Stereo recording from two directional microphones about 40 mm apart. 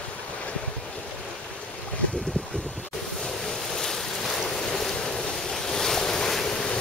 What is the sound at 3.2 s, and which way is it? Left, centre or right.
Waves, centre.